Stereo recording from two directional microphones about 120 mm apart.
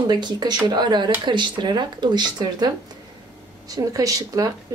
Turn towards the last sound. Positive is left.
turn(degrees=-30)  # may be behind; listen again after turning